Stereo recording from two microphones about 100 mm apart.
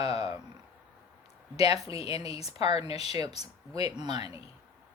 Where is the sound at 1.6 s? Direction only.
90° left.